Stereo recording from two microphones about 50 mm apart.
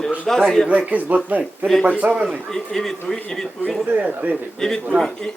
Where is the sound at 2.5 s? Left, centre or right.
Centre.